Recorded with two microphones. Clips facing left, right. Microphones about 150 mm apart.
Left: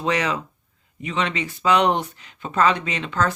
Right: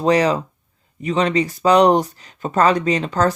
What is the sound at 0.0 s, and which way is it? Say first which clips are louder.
Speech: right 7 dB; 35° right (ahead or behind).